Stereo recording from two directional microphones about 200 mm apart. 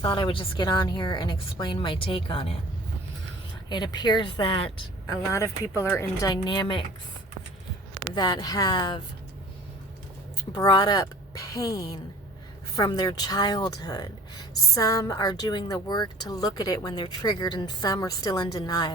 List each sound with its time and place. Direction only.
0.0 s speech: 25° left (ahead or behind)
3.7 s speech: 20° left (ahead or behind)
5.3 s speech: 15° left (ahead or behind)
8.1 s speech: 20° left (ahead or behind)
10.5 s a woman's voice: 20° left (ahead or behind)